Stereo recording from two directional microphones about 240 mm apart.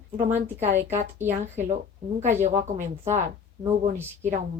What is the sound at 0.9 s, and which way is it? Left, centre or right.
Speech, centre.